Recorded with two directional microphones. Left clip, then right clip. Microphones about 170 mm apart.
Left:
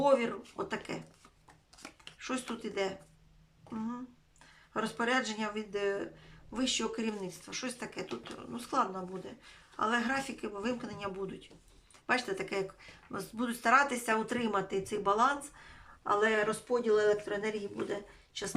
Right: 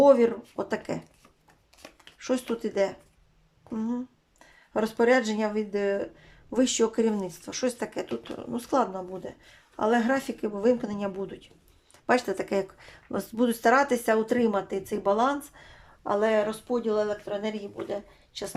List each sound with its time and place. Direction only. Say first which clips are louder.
0.0 s speech: right 9 dB; 35° right (ahead or behind)
2.1 s speech: right 10 dB; 35° right (ahead or behind); by 17.9 s 20° right (ahead or behind)